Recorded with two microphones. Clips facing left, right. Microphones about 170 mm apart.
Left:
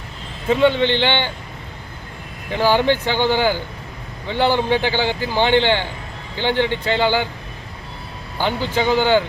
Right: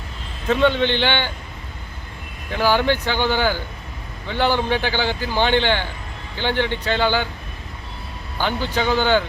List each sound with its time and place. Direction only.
0.4 s a man's voice: 15° left (ahead or behind)
2.5 s a man's voice: 15° left (ahead or behind)
8.4 s a man's voice: 15° left (ahead or behind)